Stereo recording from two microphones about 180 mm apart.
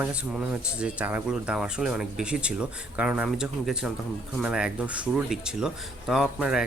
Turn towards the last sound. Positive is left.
turn(degrees=-5)  # may be behind; listen again after turning